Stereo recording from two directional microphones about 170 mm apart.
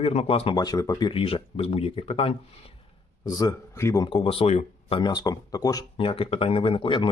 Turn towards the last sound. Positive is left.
turn(degrees=30)  # may be behind; listen again after turning